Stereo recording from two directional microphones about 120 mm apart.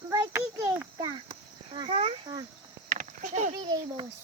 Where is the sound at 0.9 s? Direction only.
40° right (ahead or behind).